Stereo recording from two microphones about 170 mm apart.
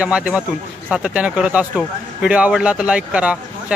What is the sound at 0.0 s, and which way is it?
Speech, 5° right (ahead or behind).